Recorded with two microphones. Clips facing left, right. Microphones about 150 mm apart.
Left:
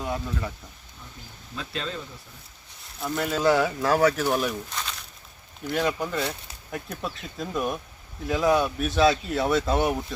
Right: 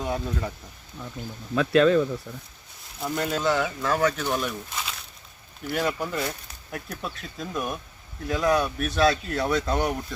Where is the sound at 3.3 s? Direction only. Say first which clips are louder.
Left 5 dB; 5° left (ahead or behind).